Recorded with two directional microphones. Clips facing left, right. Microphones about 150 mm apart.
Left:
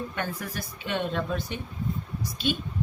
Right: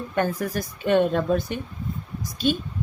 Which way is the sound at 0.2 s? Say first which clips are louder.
Right 13 dB; 45° right (ahead or behind).